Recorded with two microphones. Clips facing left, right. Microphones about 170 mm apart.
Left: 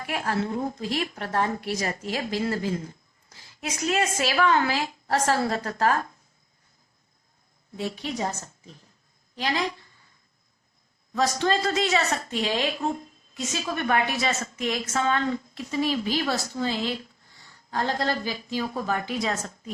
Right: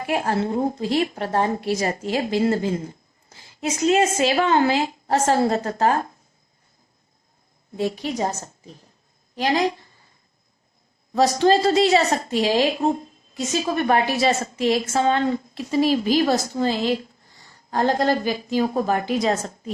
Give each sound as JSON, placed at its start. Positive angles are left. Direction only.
{"t": 0.0, "sound": "a woman's voice", "side_deg": -30}
{"t": 7.8, "sound": "a woman's voice", "side_deg": -40}
{"t": 11.1, "sound": "a woman's voice", "side_deg": -35}